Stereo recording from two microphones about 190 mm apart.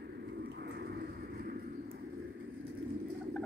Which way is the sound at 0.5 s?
60° right (ahead or behind).